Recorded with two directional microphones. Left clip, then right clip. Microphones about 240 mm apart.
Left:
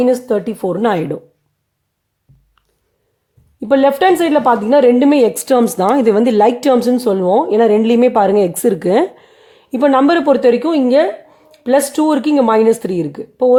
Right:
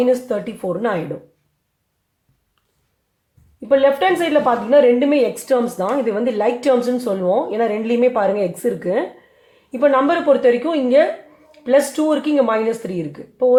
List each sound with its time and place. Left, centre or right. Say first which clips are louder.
0.0 s a woman's voice: left 4 dB; left
3.7 s a woman's voice: left 3 dB; left